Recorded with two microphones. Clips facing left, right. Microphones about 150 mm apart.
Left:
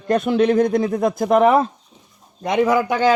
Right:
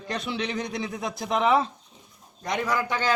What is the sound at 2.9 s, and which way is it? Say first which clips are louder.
Speech: left 9 dB; 50° left (ahead or behind).